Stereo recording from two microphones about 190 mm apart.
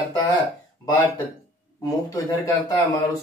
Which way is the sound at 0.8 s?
20° left (ahead or behind).